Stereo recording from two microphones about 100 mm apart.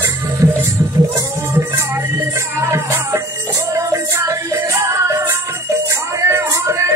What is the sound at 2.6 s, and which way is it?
Music, 30° right (ahead or behind).